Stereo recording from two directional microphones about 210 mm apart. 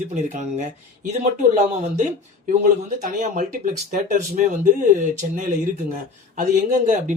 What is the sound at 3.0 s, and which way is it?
Speech, 40° right (ahead or behind).